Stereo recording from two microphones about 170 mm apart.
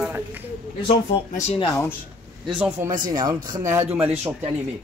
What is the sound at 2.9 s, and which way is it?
Speech, 50° right (ahead or behind).